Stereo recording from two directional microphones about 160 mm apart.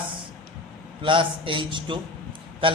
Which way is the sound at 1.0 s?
30° right (ahead or behind).